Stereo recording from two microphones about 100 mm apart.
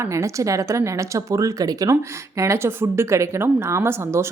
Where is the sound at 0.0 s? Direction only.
30° right (ahead or behind).